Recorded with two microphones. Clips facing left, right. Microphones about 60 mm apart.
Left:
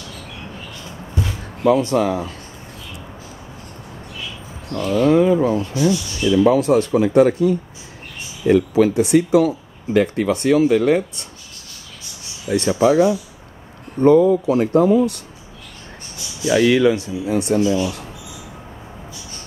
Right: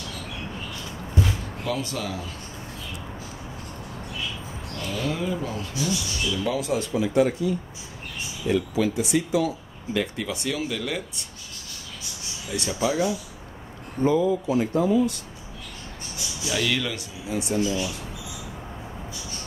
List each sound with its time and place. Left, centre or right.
1.7 s speech: left
4.8 s speech: left
12.4 s speech: left
14.0 s speech: left
16.5 s speech: left
17.3 s speech: left